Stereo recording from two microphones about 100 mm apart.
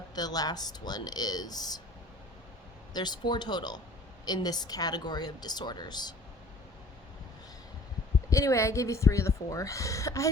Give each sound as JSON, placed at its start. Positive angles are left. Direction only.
{"t": 0.1, "sound": "speech", "side_deg": 40}
{"t": 2.9, "sound": "a woman's voice", "side_deg": 45}
{"t": 8.3, "sound": "speech", "side_deg": 30}